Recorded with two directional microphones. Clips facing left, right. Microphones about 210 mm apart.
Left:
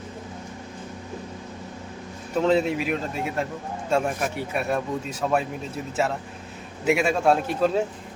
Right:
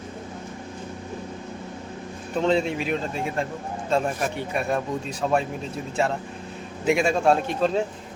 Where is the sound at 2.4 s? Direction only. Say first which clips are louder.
Left 1 dB; 5° left (ahead or behind).